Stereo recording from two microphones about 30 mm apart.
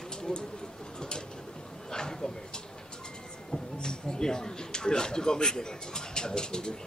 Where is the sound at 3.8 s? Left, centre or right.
Left.